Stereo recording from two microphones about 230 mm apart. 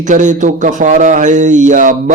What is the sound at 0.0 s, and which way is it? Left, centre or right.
A man's voice, right.